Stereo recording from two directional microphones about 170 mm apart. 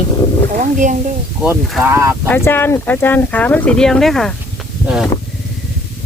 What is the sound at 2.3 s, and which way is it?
Speech, 10° left (ahead or behind).